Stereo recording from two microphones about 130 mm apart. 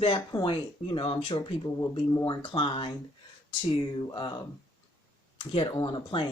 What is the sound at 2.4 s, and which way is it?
Speech, 40° left (ahead or behind).